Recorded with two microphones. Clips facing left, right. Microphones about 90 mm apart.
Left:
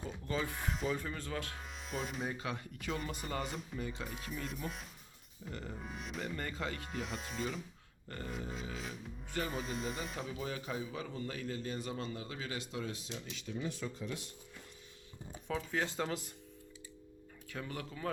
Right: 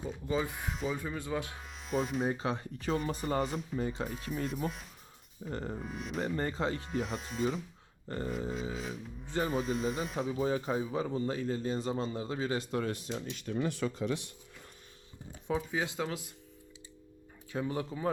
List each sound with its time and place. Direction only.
0.0 s speech: 15° right (ahead or behind)
1.5 s speech: centre (ahead or behind)
2.2 s a man's voice: 30° right (ahead or behind)
4.1 s speech: centre (ahead or behind)
5.5 s a man's voice: 40° right (ahead or behind)
5.8 s speech: centre (ahead or behind)
6.1 s a man's voice: 35° right (ahead or behind)
6.8 s speech: centre (ahead or behind)
8.0 s a sound: 30° right (ahead or behind)
8.3 s speech: centre (ahead or behind)
10.2 s a man's voice: 30° right (ahead or behind)
12.7 s speech: 55° right (ahead or behind)
15.4 s speech: 10° right (ahead or behind)
17.5 s speech: 25° right (ahead or behind)